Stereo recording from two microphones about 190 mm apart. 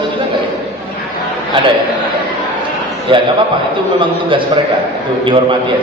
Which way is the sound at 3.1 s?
25° right (ahead or behind).